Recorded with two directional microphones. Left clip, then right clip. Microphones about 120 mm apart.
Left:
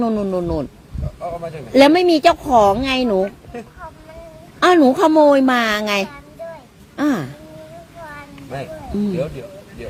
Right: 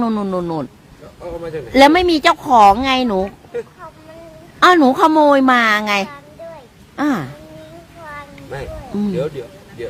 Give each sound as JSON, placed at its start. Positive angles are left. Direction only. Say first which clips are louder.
{"t": 0.0, "sound": "speech", "louder": "even", "side_deg": -20}
{"t": 1.7, "sound": "a woman's voice", "louder": "right 1 dB", "side_deg": -15}
{"t": 3.1, "sound": "speech", "louder": "left 1 dB", "side_deg": -25}
{"t": 4.6, "sound": "a woman's voice", "louder": "right 2 dB", "side_deg": -15}